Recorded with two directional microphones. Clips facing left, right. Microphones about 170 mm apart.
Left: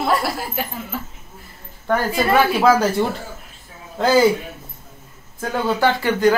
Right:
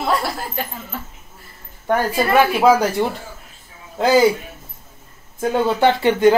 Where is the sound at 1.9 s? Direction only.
15° right (ahead or behind).